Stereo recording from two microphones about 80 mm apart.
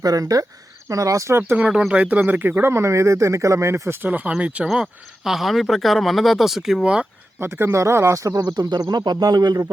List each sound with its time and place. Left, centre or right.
0.0 s speech: right
1.4 s speech: right
4.7 s speech: centre
7.3 s speech: right